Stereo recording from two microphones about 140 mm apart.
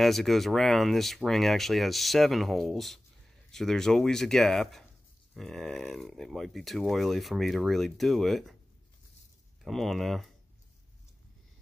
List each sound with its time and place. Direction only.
0.0 s speech: centre (ahead or behind)
9.6 s speech: centre (ahead or behind)